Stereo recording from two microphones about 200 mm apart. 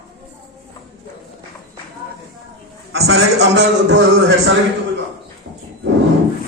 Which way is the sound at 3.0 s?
60° right (ahead or behind).